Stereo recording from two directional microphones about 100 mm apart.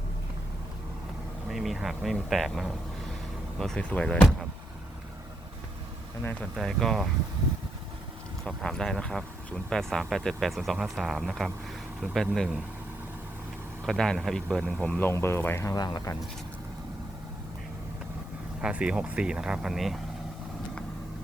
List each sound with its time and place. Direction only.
1.5 s a man's voice: centre (ahead or behind)
6.4 s speech: 5° left (ahead or behind)
8.4 s speech: 5° left (ahead or behind)
13.8 s a man's voice: 5° left (ahead or behind)
15.1 s speech: 25° left (ahead or behind)
15.7 s speech: 40° left (ahead or behind)
18.6 s speech: 10° right (ahead or behind)